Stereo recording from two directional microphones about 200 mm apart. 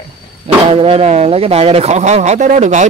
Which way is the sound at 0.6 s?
30° right (ahead or behind).